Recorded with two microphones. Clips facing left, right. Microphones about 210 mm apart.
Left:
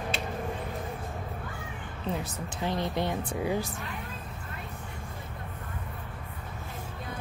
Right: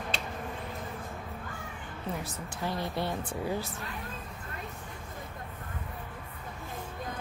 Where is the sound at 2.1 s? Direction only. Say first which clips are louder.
Left 3 dB; 20° left (ahead or behind).